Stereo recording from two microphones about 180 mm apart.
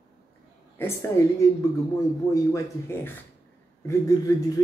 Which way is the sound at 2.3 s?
15° left (ahead or behind).